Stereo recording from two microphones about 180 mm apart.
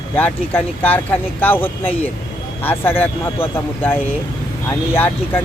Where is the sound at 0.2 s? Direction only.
10° left (ahead or behind).